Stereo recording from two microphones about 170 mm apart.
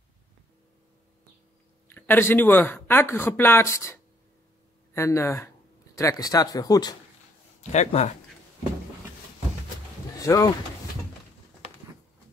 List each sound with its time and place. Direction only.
1.9 s speech: 10° left (ahead or behind)
7.7 s speech: 40° left (ahead or behind)
10.1 s speech: 20° left (ahead or behind)